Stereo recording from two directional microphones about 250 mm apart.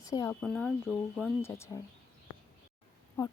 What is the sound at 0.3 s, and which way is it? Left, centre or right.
Speech, centre.